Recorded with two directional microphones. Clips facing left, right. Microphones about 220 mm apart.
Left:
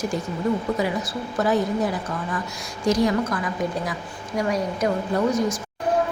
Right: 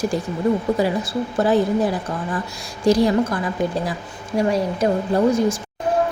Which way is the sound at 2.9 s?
30° right (ahead or behind).